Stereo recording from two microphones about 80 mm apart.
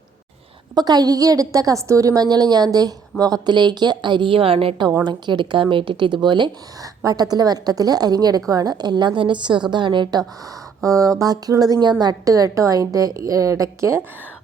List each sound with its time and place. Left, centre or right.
0.7 s a woman's voice: right
6.2 s speech: right
7.0 s a woman's voice: right
10.8 s a woman's voice: right